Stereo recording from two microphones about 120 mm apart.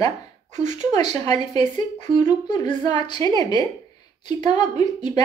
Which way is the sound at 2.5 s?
40° left (ahead or behind).